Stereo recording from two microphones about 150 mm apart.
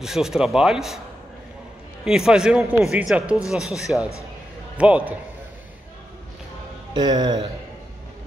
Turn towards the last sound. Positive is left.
turn(degrees=-30)  # may be behind; listen again after turning